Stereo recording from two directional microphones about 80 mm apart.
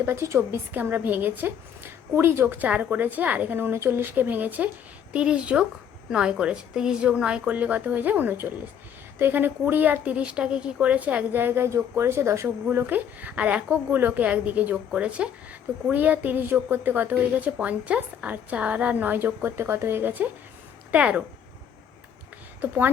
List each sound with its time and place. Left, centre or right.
0.0 s a woman's voice: right
12.7 s a woman's voice: right
22.6 s a woman's voice: right